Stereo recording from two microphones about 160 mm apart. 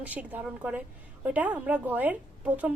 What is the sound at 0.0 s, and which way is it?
A woman's voice, 10° right (ahead or behind).